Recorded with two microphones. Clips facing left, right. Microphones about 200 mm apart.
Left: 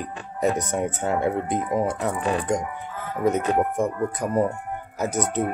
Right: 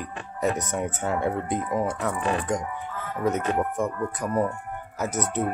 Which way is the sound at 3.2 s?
15° left (ahead or behind).